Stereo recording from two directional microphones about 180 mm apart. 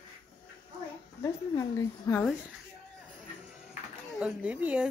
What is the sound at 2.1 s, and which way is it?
Speech, 20° left (ahead or behind).